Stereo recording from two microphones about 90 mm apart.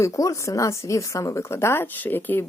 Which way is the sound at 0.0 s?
35° left (ahead or behind).